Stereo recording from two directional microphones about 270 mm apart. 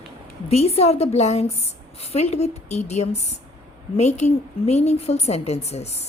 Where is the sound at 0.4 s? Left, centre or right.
Left.